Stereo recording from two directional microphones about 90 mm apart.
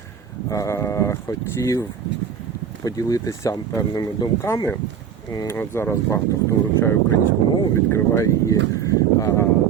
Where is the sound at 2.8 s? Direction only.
40° left (ahead or behind).